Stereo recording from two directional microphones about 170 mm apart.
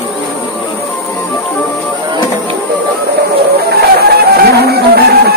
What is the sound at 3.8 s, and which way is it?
Music, 70° right (ahead or behind).